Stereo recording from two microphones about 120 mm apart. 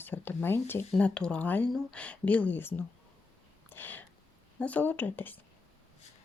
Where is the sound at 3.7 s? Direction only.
15° left (ahead or behind).